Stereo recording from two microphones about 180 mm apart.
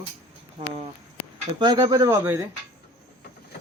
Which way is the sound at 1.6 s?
20° right (ahead or behind).